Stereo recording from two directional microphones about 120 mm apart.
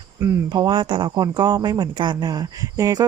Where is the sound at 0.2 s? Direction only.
30° right (ahead or behind).